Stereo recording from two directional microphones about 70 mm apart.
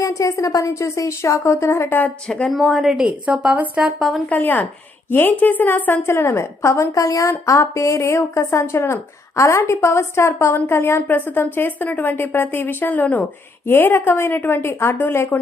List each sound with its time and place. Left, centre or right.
0.0 s a woman's voice: left
2.5 s speech: centre
3.2 s speech: centre
4.3 s a woman's voice: left